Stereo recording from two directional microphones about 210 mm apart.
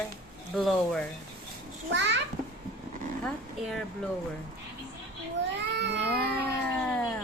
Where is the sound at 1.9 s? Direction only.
55° right (ahead or behind).